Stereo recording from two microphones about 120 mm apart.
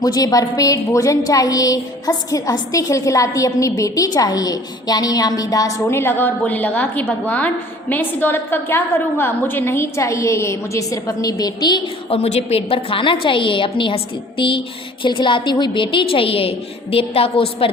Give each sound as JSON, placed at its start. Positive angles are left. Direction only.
{"t": 0.0, "sound": "a woman's voice", "side_deg": 30}
{"t": 12.1, "sound": "a woman's voice", "side_deg": 55}